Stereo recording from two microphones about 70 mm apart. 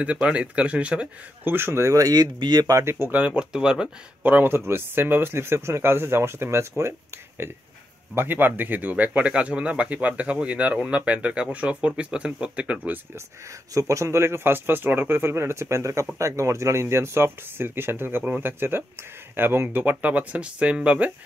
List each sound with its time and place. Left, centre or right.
0.0 s speech: centre
1.4 s speech: right
2.8 s speech: right
3.1 s speech: right
3.5 s speech: centre
4.2 s speech: right
13.7 s speech: right; by 21.1 s centre